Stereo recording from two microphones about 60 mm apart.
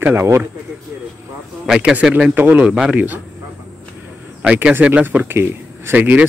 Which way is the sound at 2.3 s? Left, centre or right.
Right.